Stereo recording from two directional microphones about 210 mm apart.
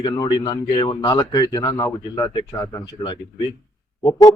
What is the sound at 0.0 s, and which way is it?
A man's voice, 20° left (ahead or behind).